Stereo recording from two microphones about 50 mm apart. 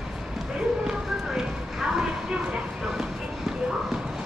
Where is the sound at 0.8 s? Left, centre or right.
Centre.